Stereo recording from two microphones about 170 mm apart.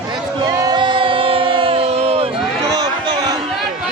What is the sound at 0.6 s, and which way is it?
Crowd, 25° right (ahead or behind).